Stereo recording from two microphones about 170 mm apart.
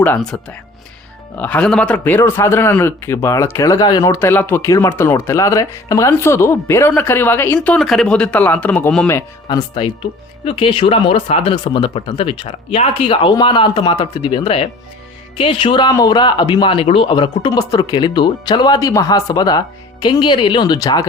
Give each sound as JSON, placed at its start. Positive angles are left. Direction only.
{"t": 0.0, "sound": "speech", "side_deg": 5}
{"t": 1.4, "sound": "speech", "side_deg": 10}